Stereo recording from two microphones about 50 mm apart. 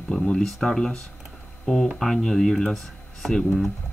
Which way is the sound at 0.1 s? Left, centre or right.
Centre.